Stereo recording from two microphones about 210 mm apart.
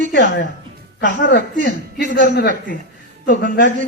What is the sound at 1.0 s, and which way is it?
A man's voice, 45° left (ahead or behind).